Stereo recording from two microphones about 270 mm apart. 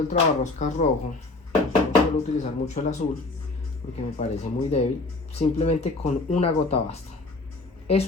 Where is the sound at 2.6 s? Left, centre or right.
Left.